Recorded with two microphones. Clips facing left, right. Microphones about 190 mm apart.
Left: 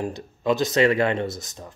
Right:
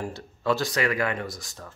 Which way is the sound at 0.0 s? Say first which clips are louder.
Left 3 dB; 15° left (ahead or behind).